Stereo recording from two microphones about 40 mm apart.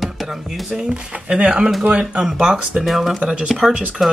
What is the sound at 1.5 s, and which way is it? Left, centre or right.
Speech, centre.